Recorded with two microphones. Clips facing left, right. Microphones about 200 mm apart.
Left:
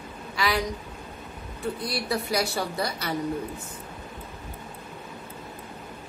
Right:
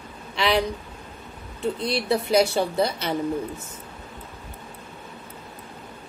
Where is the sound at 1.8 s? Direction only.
25° right (ahead or behind).